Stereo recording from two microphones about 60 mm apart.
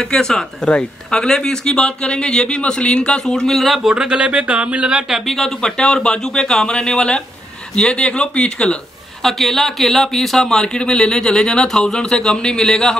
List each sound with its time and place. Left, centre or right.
0.0 s speech: centre
3.9 s speech: centre
5.1 s speech: centre
9.2 s speech: centre